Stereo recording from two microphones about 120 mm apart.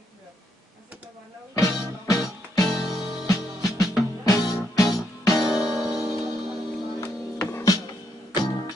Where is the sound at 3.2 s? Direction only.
30° left (ahead or behind).